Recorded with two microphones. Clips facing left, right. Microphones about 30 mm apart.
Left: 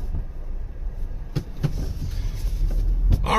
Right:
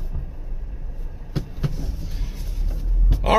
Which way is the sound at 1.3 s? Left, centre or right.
Centre.